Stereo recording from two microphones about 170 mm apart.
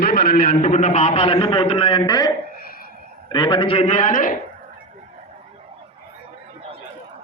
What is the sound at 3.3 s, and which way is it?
A man's voice, 30° left (ahead or behind).